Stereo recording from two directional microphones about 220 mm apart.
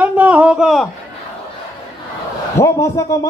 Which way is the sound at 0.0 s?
5° right (ahead or behind).